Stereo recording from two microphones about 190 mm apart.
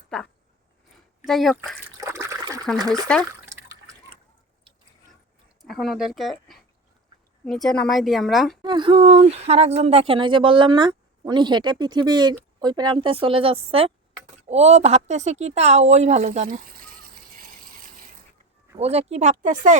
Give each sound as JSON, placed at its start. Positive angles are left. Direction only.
{"t": 1.2, "sound": "a woman's voice", "side_deg": 0}
{"t": 2.0, "sound": "water", "side_deg": -15}
{"t": 3.1, "sound": "speech", "side_deg": 5}
{"t": 5.6, "sound": "a woman's voice", "side_deg": 0}
{"t": 8.6, "sound": "speech", "side_deg": -25}
{"t": 18.8, "sound": "speech", "side_deg": -35}